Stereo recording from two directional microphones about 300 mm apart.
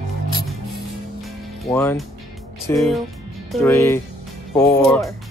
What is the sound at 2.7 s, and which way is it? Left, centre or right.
Speech, centre.